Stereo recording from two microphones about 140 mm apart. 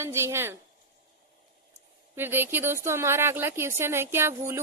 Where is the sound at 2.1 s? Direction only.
15° right (ahead or behind).